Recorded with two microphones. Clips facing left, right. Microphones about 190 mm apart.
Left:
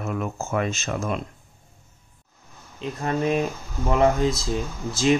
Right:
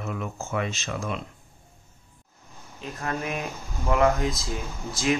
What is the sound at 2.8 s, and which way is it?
Speech, 25° left (ahead or behind).